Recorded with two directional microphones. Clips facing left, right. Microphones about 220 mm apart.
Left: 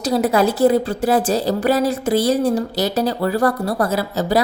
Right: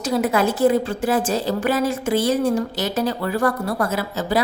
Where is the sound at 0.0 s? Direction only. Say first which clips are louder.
Left 3 dB; 35° left (ahead or behind).